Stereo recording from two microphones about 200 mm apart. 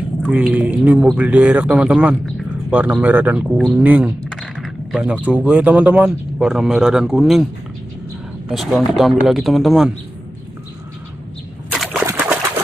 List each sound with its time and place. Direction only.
0.3 s speech: 5° right (ahead or behind)
8.5 s speech: centre (ahead or behind)
11.7 s bird: centre (ahead or behind)
12.0 s pigeon: 10° right (ahead or behind)